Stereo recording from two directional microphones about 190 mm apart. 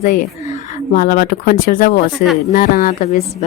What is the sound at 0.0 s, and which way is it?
Speech, 45° left (ahead or behind).